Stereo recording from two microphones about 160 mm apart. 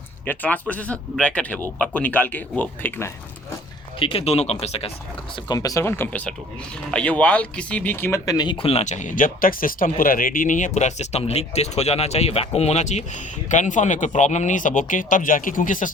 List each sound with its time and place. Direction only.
0.3 s speech: 10° left (ahead or behind)
4.0 s speech: 35° left (ahead or behind)
5.5 s speech: 20° left (ahead or behind); by 15.9 s 55° left (ahead or behind)